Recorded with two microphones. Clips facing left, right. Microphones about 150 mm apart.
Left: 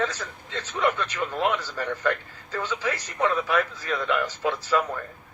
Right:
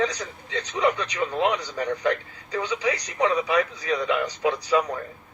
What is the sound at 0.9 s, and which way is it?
Speech, centre (ahead or behind).